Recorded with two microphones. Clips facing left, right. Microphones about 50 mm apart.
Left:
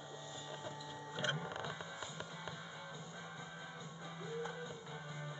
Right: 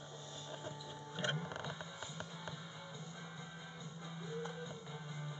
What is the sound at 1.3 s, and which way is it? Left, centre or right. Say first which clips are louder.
Music: left 1 dB; centre.